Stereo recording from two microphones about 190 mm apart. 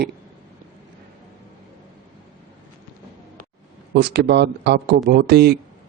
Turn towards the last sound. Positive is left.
turn(degrees=-60)  # may be behind; listen again after turning